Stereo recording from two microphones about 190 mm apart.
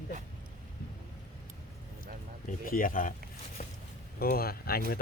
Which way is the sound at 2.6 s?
50° left (ahead or behind).